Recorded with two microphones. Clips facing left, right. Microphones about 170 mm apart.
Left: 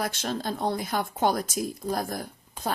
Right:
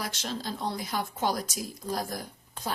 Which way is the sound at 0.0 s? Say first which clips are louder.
Left 5 dB; 55° left (ahead or behind).